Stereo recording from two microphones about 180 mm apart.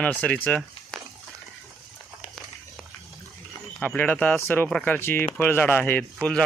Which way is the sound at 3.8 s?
10° left (ahead or behind).